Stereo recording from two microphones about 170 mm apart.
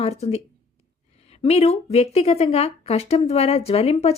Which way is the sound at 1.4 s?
35° left (ahead or behind).